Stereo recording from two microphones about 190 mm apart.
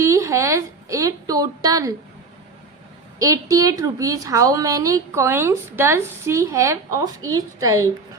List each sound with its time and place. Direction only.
0.0 s speech: 15° right (ahead or behind)
3.2 s a woman's voice: 15° right (ahead or behind)